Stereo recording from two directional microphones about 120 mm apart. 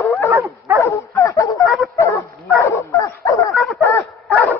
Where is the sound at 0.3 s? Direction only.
20° right (ahead or behind).